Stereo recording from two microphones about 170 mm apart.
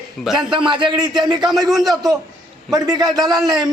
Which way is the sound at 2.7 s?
20° right (ahead or behind).